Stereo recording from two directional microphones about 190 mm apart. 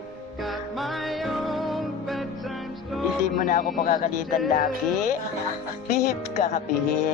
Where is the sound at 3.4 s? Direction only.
45° left (ahead or behind).